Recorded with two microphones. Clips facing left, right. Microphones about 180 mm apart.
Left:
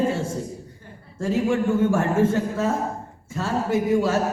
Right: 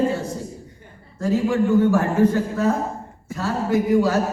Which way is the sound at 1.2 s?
25° left (ahead or behind).